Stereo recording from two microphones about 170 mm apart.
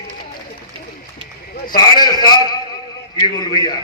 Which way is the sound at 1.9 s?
25° left (ahead or behind).